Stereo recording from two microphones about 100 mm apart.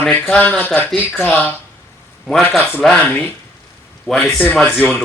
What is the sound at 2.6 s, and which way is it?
Speech, 20° left (ahead or behind).